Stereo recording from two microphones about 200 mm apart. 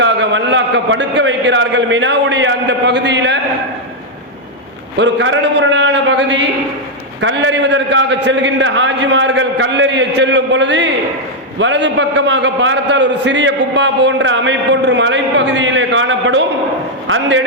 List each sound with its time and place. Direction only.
0.0 s a man's voice: 65° right (ahead or behind)
4.9 s a man's voice: 60° right (ahead or behind)